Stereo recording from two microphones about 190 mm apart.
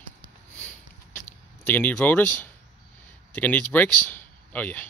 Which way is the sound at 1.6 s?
10° left (ahead or behind).